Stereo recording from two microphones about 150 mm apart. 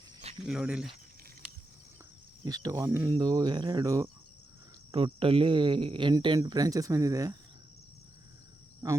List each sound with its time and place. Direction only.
0.4 s speech: 5° right (ahead or behind)
2.4 s speech: 25° right (ahead or behind)
4.9 s speech: 35° right (ahead or behind)
8.8 s speech: 25° right (ahead or behind)